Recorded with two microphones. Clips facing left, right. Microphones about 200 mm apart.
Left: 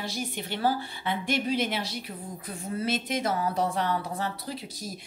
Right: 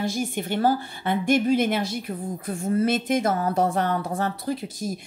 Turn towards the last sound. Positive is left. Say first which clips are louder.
# right 9 dB
turn(degrees=-50)  # may be behind; listen again after turning